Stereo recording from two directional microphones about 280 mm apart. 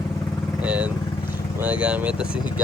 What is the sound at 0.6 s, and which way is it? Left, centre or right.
Speech, centre.